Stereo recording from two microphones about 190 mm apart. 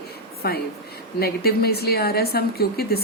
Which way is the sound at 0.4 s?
55° left (ahead or behind).